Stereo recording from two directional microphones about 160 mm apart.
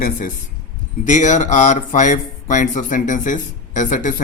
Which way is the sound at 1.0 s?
50° left (ahead or behind).